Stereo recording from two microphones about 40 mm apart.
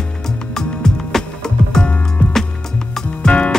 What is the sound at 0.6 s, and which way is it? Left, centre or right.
Music, centre.